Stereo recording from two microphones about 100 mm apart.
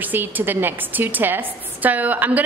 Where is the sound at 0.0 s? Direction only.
20° right (ahead or behind).